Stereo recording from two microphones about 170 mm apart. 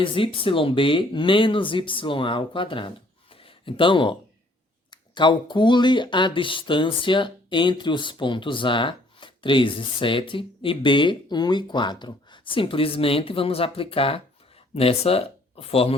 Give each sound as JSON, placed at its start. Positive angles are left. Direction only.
{"t": 0.0, "sound": "speech", "side_deg": 30}